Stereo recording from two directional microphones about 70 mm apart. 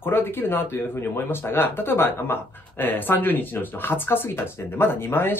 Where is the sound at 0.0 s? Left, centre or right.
Left.